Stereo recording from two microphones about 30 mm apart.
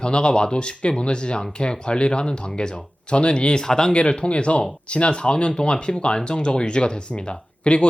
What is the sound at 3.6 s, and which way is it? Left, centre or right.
Speech, left.